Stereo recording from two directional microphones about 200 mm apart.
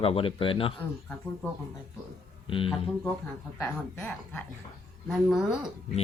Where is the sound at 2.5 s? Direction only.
25° left (ahead or behind).